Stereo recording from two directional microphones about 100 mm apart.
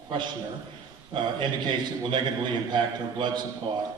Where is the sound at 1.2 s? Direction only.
50° right (ahead or behind).